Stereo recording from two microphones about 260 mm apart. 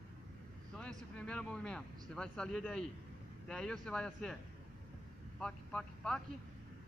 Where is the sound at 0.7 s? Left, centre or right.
Centre.